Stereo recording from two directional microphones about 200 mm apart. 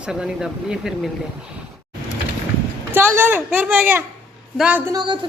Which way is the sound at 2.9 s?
10° right (ahead or behind).